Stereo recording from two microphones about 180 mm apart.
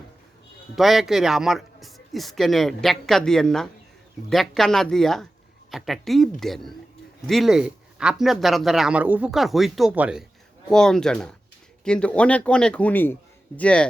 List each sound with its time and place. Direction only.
0.8 s a man's voice: centre (ahead or behind)